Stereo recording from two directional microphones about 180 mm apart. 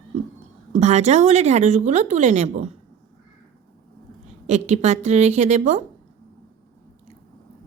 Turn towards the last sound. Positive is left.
turn(degrees=-40)  # may be behind; listen again after turning